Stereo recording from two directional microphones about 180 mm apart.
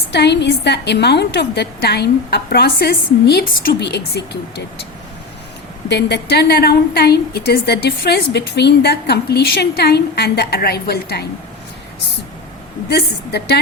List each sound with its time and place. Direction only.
0.1 s a woman's voice: 70° left (ahead or behind)
5.9 s a woman's voice: 70° left (ahead or behind)
12.9 s a woman's voice: 65° left (ahead or behind)